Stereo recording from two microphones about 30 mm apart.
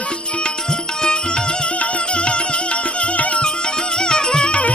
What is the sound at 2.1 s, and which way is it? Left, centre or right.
Music, left.